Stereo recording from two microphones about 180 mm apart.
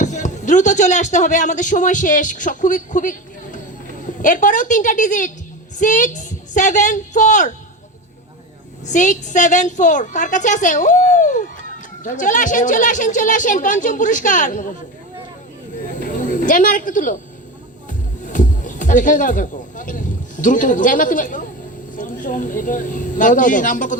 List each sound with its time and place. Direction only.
0.0 s a man's voice: 40° left (ahead or behind)
8.9 s a woman's voice: 45° left (ahead or behind)
15.9 s a sound: 45° left (ahead or behind)
18.2 s a woman's voice: 45° left (ahead or behind)